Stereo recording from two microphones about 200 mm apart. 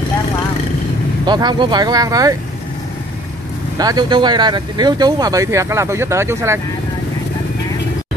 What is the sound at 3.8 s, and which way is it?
Speech, 20° right (ahead or behind).